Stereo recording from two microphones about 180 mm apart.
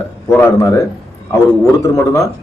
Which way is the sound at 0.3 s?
15° left (ahead or behind).